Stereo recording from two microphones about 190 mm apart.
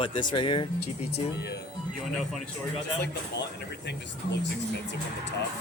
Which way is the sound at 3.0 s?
65° left (ahead or behind).